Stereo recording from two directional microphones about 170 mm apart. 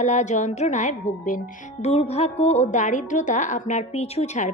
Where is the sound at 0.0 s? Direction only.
45° left (ahead or behind).